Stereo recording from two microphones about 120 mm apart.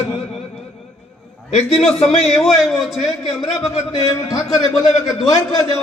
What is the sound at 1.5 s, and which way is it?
Speech, 60° left (ahead or behind).